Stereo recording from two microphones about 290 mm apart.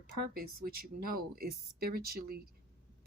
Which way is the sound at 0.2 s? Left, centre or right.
Right.